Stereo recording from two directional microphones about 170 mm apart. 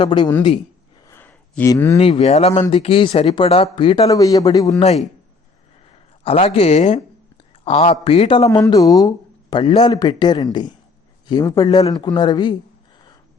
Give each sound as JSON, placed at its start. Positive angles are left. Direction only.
{"t": 0.0, "sound": "speech", "side_deg": 30}
{"t": 1.0, "sound": "a sound", "side_deg": 10}
{"t": 1.7, "sound": "speech", "side_deg": 20}
{"t": 2.0, "sound": "speech", "side_deg": 35}
{"t": 4.1, "sound": "speech", "side_deg": 20}
{"t": 4.8, "sound": "speech", "side_deg": 40}
{"t": 6.2, "sound": "speech", "side_deg": 35}
{"t": 8.4, "sound": "a man's voice", "side_deg": 20}